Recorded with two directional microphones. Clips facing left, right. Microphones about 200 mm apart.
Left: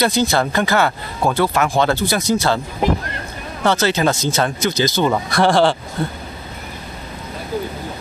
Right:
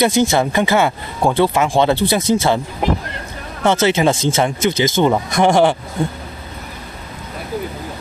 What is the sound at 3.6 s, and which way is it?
Speech, 25° right (ahead or behind).